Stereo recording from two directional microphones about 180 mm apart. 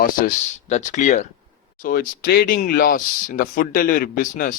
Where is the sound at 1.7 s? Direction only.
50° left (ahead or behind).